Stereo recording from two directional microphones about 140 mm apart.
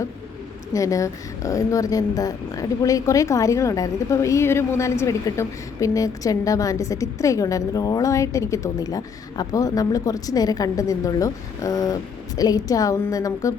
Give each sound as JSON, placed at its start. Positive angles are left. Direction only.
{"t": 0.7, "sound": "speech", "side_deg": 25}